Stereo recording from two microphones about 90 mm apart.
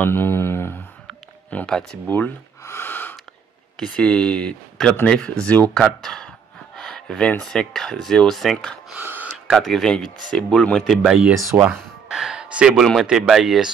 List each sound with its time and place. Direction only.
0.0 s mantra: 25° left (ahead or behind)
1.7 s speech: 10° left (ahead or behind)
2.0 s gasp: 20° left (ahead or behind)
3.7 s speech: 5° left (ahead or behind)
8.9 s gasp: 20° right (ahead or behind)
9.5 s speech: centre (ahead or behind); by 11.8 s 20° right (ahead or behind)
12.1 s a sound: 10° right (ahead or behind)
12.7 s speech: centre (ahead or behind)
13.0 s speech: 10° right (ahead or behind)